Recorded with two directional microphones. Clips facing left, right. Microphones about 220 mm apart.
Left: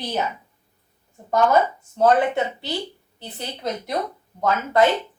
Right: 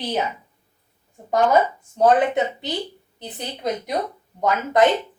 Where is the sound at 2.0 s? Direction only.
20° right (ahead or behind).